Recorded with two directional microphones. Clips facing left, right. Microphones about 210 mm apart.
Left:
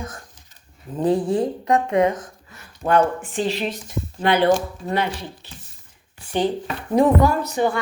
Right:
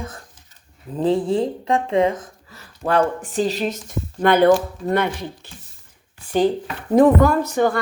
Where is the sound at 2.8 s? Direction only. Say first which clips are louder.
Left 1 dB; 35° right (ahead or behind).